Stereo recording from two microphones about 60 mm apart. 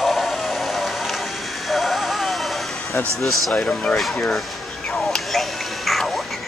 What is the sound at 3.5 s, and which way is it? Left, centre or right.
Speech, centre.